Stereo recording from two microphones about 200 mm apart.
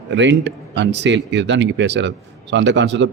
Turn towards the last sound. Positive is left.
turn(degrees=-65)  # may be behind; listen again after turning